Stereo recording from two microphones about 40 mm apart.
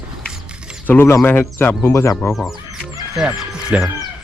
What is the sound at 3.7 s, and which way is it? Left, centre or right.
Speech, right.